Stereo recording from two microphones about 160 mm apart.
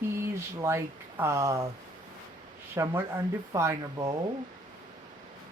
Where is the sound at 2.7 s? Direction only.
20° right (ahead or behind).